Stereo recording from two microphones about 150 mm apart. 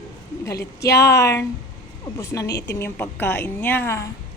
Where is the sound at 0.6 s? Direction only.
20° left (ahead or behind).